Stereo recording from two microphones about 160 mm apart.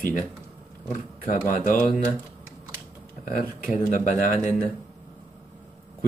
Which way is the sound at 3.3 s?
55° left (ahead or behind).